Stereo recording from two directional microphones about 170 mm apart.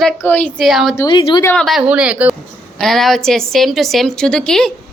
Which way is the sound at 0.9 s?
25° left (ahead or behind).